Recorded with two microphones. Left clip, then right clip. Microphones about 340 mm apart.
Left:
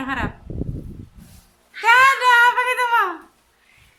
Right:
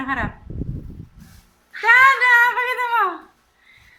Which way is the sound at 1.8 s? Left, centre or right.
Centre.